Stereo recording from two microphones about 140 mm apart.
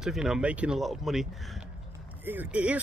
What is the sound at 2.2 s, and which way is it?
Speech, 15° right (ahead or behind).